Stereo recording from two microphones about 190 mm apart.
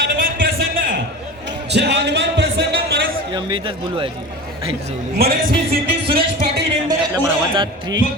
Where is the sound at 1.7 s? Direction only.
60° right (ahead or behind).